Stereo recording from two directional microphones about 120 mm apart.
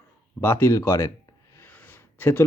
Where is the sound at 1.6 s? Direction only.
15° left (ahead or behind).